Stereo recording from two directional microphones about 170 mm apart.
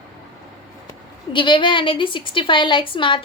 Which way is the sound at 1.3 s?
30° left (ahead or behind).